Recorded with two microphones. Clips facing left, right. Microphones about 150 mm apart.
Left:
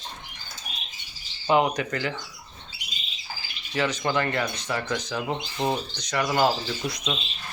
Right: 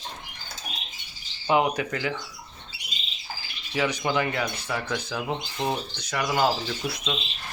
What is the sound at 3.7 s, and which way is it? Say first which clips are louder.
Speech: even; 10° right (ahead or behind).